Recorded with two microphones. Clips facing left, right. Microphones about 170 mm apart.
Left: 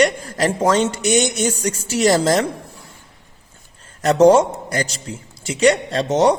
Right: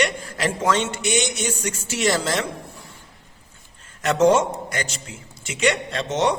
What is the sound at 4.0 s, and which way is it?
A man's voice, 35° left (ahead or behind).